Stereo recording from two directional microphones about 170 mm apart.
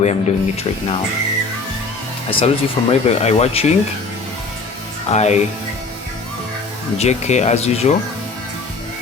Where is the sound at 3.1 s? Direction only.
40° left (ahead or behind).